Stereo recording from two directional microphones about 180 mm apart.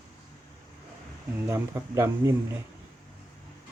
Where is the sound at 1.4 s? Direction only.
15° right (ahead or behind).